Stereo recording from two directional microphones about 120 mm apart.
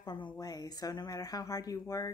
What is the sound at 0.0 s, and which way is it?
A woman's voice, 35° left (ahead or behind).